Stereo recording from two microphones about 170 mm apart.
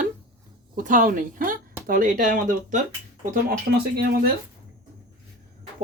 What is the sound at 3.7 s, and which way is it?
Speech, 70° right (ahead or behind).